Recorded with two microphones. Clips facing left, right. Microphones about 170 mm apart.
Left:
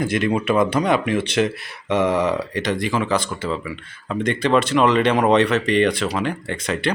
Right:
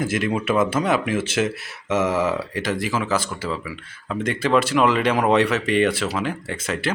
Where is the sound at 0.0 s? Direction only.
5° right (ahead or behind).